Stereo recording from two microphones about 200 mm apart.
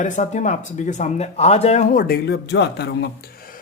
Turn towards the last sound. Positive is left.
turn(degrees=45)  # may be behind; listen again after turning